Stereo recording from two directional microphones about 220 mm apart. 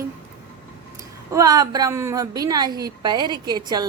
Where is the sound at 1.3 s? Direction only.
15° right (ahead or behind).